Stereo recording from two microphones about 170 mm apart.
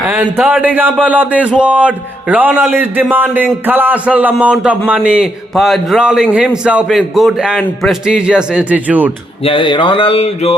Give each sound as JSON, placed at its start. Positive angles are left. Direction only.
{"t": 0.1, "sound": "a man's voice", "side_deg": -10}
{"t": 9.4, "sound": "speech", "side_deg": 30}